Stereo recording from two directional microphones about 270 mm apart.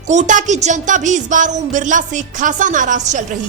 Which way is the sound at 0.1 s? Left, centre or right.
Right.